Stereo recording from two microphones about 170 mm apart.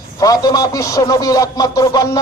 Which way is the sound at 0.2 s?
20° left (ahead or behind).